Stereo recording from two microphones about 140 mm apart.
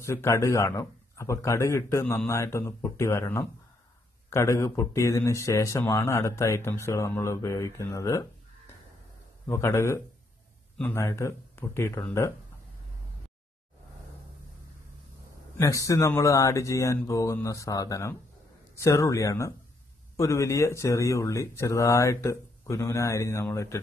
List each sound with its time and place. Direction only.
0.0 s speech: 20° left (ahead or behind)
9.5 s speech: 20° left (ahead or behind)
15.5 s speech: 25° left (ahead or behind)